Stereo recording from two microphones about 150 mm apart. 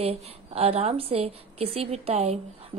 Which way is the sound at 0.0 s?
40° right (ahead or behind).